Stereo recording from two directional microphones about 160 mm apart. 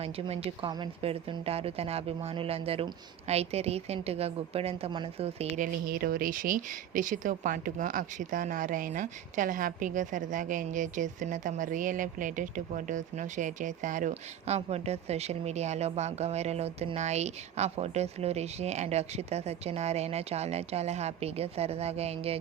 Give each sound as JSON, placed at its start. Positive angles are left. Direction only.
{"t": 0.0, "sound": "a woman's voice", "side_deg": -40}
{"t": 5.5, "sound": "speech", "side_deg": -65}